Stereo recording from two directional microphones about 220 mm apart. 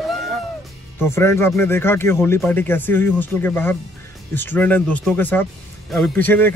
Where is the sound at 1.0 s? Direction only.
10° left (ahead or behind).